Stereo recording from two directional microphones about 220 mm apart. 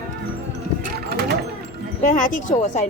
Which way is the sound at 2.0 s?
35° left (ahead or behind).